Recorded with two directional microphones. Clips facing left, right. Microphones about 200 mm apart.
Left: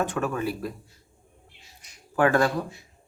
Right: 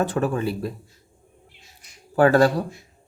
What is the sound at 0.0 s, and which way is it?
Speech, 35° right (ahead or behind).